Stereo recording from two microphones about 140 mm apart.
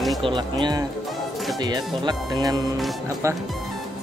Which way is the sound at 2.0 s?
25° right (ahead or behind).